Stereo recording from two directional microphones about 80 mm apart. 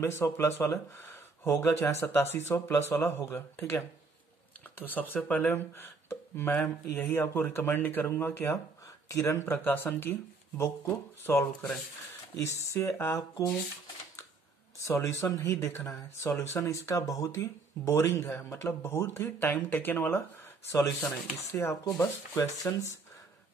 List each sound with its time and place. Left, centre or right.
0.0 s speech: left
8.8 s speech: left
11.2 s speech: left
12.7 s speech: left
14.8 s speech: left
15.5 s speech: left
22.0 s speech: left